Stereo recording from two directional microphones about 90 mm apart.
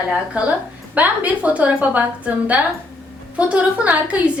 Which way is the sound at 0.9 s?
15° right (ahead or behind).